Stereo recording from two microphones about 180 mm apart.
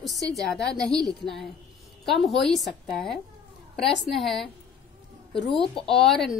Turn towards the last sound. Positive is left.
turn(degrees=0)  # may be behind; listen again after turning